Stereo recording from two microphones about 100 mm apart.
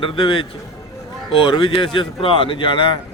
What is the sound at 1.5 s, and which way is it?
Speech, 55° left (ahead or behind).